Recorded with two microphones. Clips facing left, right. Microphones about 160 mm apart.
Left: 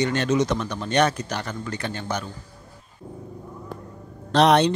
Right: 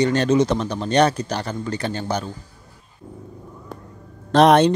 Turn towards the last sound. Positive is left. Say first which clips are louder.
# right 4 dB
turn(degrees=-50)  # may be behind; listen again after turning